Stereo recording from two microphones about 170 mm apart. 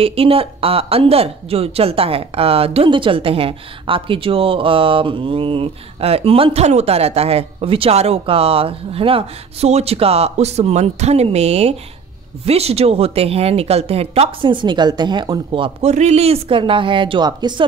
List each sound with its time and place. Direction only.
0.0 s speech: 35° right (ahead or behind)